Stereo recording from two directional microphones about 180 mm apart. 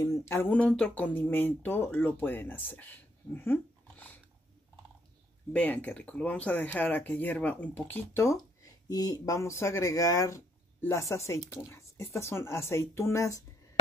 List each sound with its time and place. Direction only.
0.0 s speech: 15° left (ahead or behind)
5.5 s speech: 10° left (ahead or behind)